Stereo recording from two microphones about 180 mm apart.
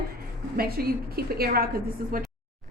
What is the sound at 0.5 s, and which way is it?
A woman's voice, 55° right (ahead or behind).